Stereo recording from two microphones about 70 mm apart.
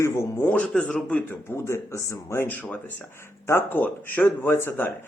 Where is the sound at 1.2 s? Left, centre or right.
Left.